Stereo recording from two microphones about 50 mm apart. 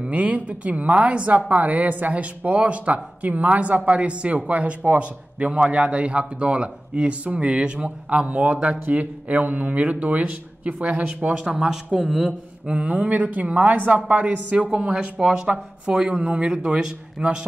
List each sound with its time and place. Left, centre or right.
0.0 s speech: right
11.3 s speech: centre
12.6 s speech: right